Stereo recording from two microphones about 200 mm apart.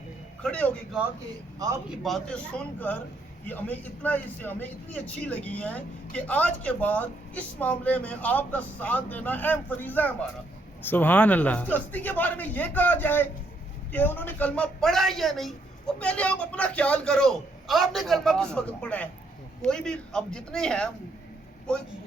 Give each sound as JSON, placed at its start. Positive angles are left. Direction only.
{"t": 0.4, "sound": "a man's voice", "side_deg": 5}
{"t": 1.5, "sound": "a man's voice", "side_deg": -20}
{"t": 1.9, "sound": "a man's voice", "side_deg": 0}